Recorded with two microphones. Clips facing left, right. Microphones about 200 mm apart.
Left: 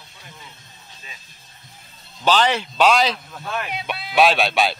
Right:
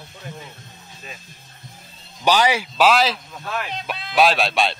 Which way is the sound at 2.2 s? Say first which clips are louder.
Even; 10° right (ahead or behind).